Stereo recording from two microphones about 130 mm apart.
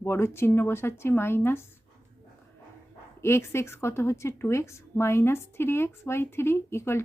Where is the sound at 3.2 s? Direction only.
20° left (ahead or behind).